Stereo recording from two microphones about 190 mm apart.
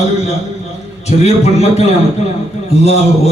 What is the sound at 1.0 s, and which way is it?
A man's voice, 35° left (ahead or behind).